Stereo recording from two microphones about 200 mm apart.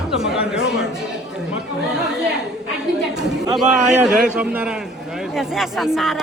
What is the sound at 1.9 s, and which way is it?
Speech, 5° right (ahead or behind).